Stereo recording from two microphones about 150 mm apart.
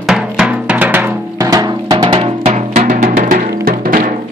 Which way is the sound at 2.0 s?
40° right (ahead or behind).